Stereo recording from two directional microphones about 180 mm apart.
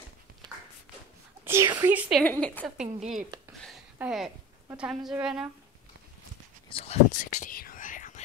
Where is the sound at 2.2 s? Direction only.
10° left (ahead or behind).